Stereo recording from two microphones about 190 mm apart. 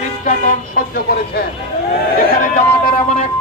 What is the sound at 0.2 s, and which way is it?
Vehicle, 45° left (ahead or behind).